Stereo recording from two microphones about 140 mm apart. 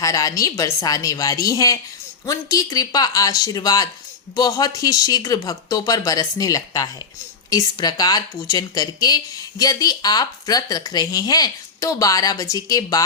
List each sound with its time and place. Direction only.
0.0 s speech: 25° left (ahead or behind)